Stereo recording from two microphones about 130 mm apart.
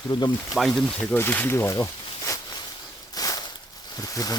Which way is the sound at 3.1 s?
30° left (ahead or behind).